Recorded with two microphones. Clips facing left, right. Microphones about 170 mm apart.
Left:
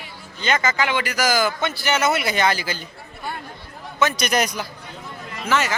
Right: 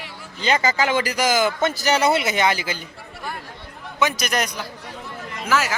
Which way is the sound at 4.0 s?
15° right (ahead or behind).